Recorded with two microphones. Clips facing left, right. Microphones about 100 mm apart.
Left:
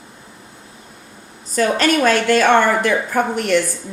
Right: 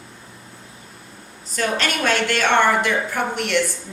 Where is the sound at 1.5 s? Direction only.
40° left (ahead or behind).